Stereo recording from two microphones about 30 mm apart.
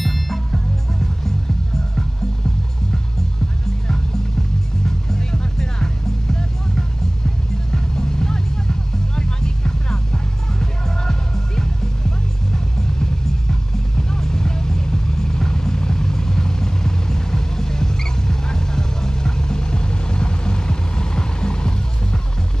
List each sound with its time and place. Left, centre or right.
0.0 s music: centre
4.8 s music: centre
7.7 s music: left